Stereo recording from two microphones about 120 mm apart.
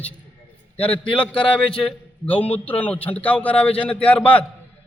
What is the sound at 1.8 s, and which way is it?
A man's voice, 15° left (ahead or behind).